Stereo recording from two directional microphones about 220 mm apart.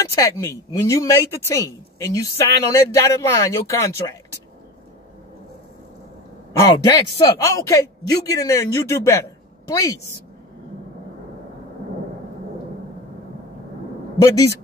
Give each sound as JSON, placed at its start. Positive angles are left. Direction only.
{"t": 0.0, "sound": "speech", "side_deg": 15}
{"t": 6.6, "sound": "speech", "side_deg": 20}
{"t": 14.1, "sound": "a man's voice", "side_deg": 15}